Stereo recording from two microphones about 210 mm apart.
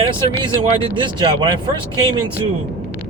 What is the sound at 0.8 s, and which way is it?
Speech, 20° right (ahead or behind).